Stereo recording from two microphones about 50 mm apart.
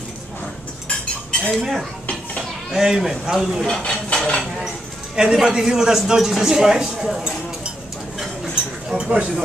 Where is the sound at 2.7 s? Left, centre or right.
Centre.